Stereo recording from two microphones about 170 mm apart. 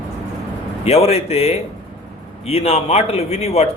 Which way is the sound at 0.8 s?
35° left (ahead or behind).